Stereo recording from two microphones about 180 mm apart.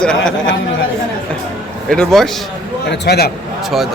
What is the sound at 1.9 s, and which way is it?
Speech, 5° left (ahead or behind).